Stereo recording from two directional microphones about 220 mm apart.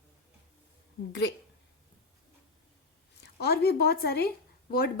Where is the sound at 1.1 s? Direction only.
55° left (ahead or behind).